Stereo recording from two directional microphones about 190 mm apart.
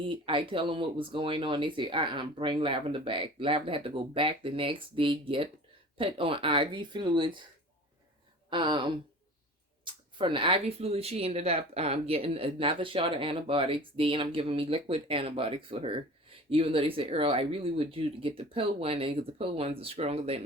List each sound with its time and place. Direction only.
0.1 s speech: 25° right (ahead or behind)
8.4 s speech: 25° right (ahead or behind)